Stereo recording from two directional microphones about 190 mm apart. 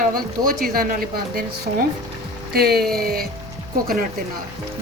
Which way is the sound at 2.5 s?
55° right (ahead or behind).